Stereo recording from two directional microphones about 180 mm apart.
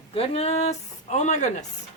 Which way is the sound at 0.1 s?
35° left (ahead or behind).